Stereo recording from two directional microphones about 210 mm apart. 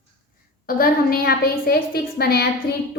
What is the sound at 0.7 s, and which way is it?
A woman's voice, 45° left (ahead or behind).